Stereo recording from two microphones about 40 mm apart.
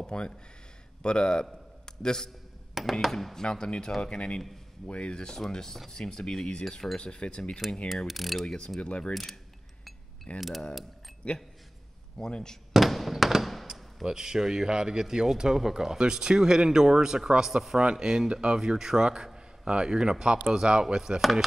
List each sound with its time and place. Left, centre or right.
0.0 s a man's voice: left
2.7 s speech: centre
3.4 s speech: left
8.1 s speech: centre
8.8 s speech: left
9.1 s speech: centre
10.3 s a man's voice: left
12.3 s speech: left
12.7 s a sound: centre
14.0 s a man's voice: centre
21.2 s speech: centre